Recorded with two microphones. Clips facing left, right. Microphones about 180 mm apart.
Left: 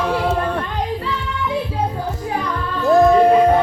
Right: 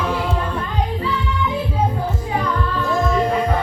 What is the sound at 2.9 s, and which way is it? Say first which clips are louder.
Music: left 10 dB; 65° left (ahead or behind).